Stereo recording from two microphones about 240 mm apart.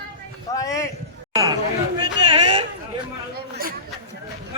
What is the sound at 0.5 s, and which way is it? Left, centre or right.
Speech, centre.